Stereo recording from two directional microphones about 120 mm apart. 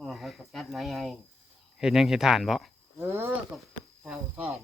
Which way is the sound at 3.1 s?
20° right (ahead or behind).